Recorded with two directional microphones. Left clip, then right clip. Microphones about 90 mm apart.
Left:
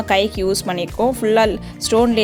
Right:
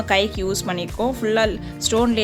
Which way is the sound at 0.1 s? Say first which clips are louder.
Left 3 dB; 30° left (ahead or behind).